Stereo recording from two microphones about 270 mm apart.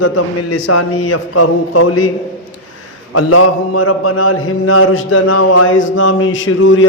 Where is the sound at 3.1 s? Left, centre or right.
Left.